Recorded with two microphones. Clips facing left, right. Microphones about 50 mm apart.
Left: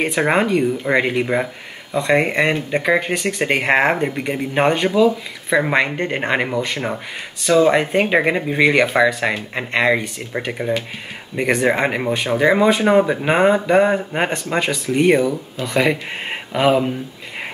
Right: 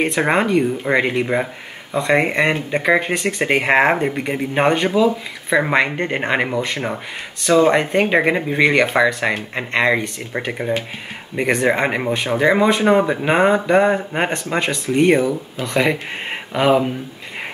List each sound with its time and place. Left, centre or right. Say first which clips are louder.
0.0 s speech: even; centre